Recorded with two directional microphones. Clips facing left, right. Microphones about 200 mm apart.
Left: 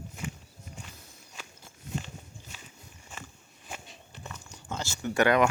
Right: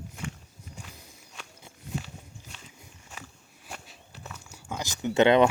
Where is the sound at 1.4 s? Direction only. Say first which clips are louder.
Even; centre (ahead or behind).